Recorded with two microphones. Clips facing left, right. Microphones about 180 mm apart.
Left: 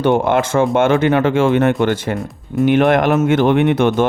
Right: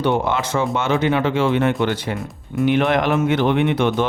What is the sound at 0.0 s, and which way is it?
Speech, 50° left (ahead or behind).